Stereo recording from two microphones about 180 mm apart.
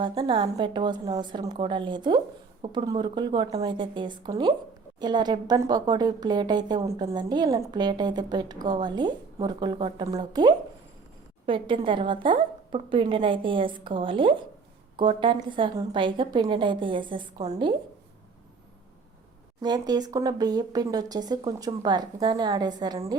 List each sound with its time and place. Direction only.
0.0 s a woman's voice: 30° right (ahead or behind)
19.6 s a woman's voice: 20° right (ahead or behind)